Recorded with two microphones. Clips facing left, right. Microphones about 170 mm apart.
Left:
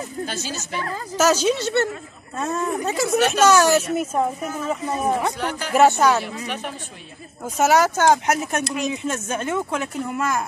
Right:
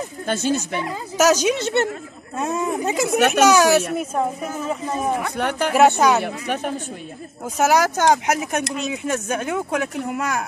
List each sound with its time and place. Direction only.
0.2 s speech: 55° right (ahead or behind)
0.6 s speech: 15° right (ahead or behind)
3.2 s speech: 60° right (ahead or behind)
3.4 s speech: 10° right (ahead or behind)
3.9 s speech: 5° left (ahead or behind)
5.4 s speech: 60° right (ahead or behind)
5.8 s speech: 15° right (ahead or behind)
6.2 s a woman's voice: 50° right (ahead or behind)
7.5 s speech: 10° right (ahead or behind)